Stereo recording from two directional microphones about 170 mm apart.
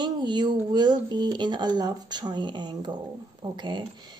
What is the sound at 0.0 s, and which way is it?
Speech, 25° right (ahead or behind).